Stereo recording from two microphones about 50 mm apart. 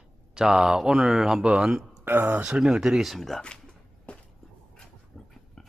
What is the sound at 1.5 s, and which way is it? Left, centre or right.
Speech, centre.